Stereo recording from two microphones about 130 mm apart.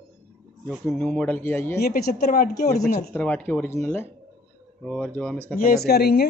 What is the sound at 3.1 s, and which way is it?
Speech, 15° left (ahead or behind).